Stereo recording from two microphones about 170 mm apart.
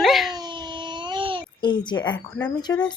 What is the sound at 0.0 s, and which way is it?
Dog, centre (ahead or behind).